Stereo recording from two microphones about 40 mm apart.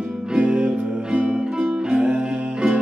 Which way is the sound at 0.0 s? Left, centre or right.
Centre.